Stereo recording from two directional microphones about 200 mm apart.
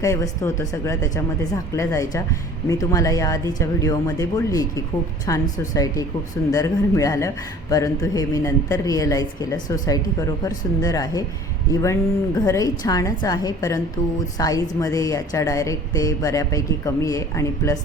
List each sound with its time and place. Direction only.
0.0 s a man's voice: 15° left (ahead or behind)